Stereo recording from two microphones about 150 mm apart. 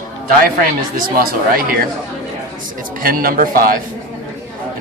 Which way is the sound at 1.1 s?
75° right (ahead or behind).